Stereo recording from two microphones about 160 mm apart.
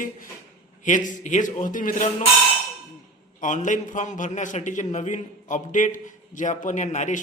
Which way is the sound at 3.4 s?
50° left (ahead or behind).